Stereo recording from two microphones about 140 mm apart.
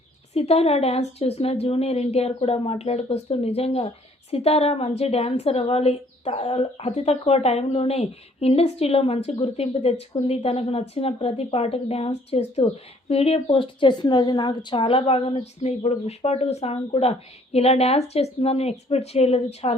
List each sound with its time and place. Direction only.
0.3 s a woman's voice: 45° left (ahead or behind)